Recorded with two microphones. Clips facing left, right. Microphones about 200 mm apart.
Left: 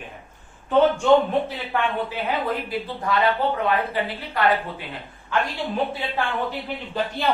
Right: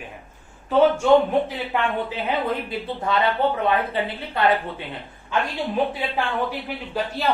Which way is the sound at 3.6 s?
25° right (ahead or behind).